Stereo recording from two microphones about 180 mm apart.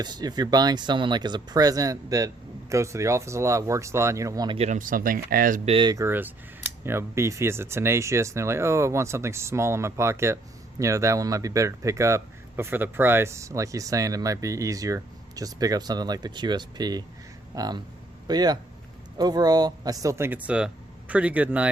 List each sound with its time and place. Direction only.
0.0 s speech: 20° right (ahead or behind)
4.5 s speech: 40° right (ahead or behind)
5.6 s speech: 25° right (ahead or behind); by 21.7 s 10° right (ahead or behind)